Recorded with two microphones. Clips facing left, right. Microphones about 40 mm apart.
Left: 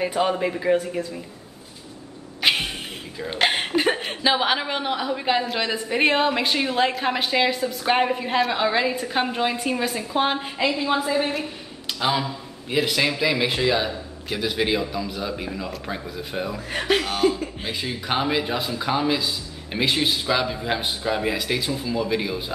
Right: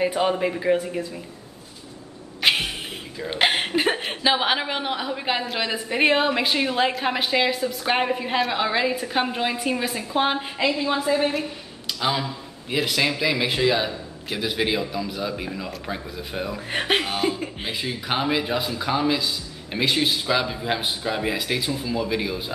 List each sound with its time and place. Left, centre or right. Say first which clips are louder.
0.0 s a woman's voice: right 1 dB; centre
2.4 s cat: even; centre
3.3 s a woman's voice: right 1 dB; centre
16.5 s speech: even; right
17.1 s a woman's voice: left 3 dB; centre